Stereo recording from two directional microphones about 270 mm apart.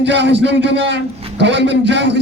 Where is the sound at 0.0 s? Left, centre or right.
Right.